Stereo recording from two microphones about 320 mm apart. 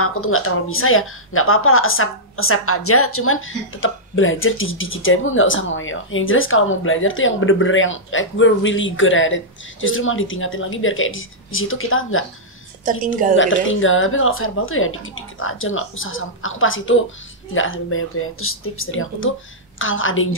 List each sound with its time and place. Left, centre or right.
0.0 s a woman's voice: left
12.9 s a woman's voice: right
13.4 s a woman's voice: left